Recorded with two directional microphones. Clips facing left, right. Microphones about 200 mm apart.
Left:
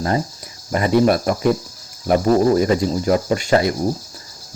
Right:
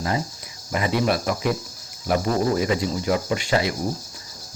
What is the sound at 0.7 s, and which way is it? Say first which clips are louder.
Speech: left 7 dB; 45° left (ahead or behind).